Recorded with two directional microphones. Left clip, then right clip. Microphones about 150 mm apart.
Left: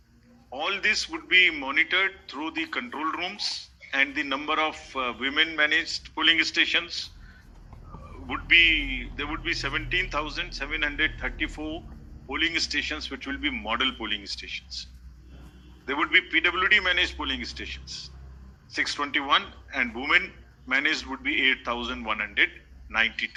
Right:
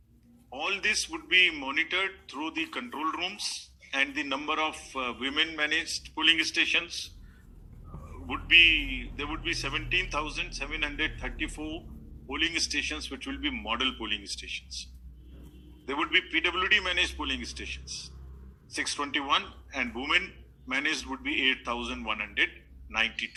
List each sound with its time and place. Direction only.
0.5 s a man's voice: 15° right (ahead or behind)
3.3 s speech: 35° left (ahead or behind)
3.8 s a man's voice: 15° right (ahead or behind)
6.8 s speech: 35° left (ahead or behind)
8.3 s a man's voice: 15° right (ahead or behind)
14.5 s speech: 35° left (ahead or behind)
16.1 s a man's voice: 15° right (ahead or behind)
18.7 s a man's voice: 15° right (ahead or behind)